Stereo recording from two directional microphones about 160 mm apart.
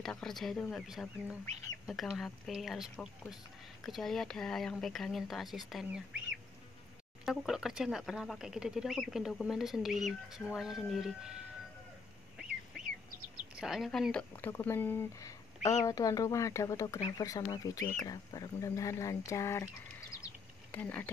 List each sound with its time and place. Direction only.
0.0 s speech: 5° left (ahead or behind)
7.2 s speech: centre (ahead or behind)
13.6 s speech: centre (ahead or behind)